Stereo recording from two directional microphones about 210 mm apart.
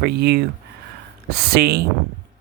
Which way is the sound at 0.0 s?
50° right (ahead or behind).